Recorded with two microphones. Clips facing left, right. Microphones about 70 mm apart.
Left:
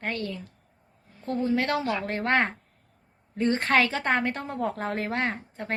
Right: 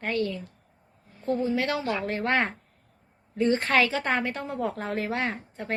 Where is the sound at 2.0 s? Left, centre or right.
Left.